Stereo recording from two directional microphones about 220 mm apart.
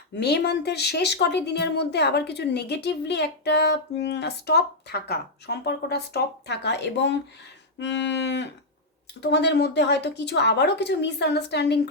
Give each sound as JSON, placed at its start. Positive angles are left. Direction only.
{"t": 0.2, "sound": "speech", "side_deg": 50}